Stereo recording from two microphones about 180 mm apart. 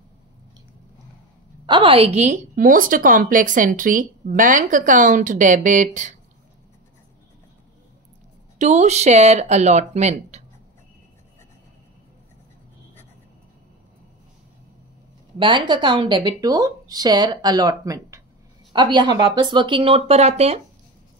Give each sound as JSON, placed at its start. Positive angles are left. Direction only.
{"t": 1.7, "sound": "a woman's voice", "side_deg": -30}
{"t": 8.5, "sound": "speech", "side_deg": -40}
{"t": 15.3, "sound": "speech", "side_deg": -25}